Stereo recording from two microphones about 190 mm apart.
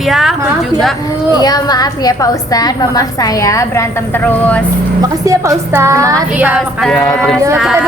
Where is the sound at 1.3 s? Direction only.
20° left (ahead or behind).